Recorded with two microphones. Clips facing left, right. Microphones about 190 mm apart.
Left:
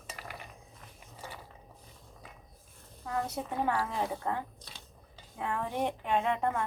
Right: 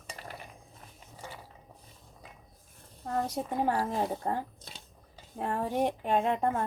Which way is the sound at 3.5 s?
35° right (ahead or behind).